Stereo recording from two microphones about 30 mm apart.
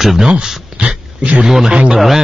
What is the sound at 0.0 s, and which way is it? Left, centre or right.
Speech, centre.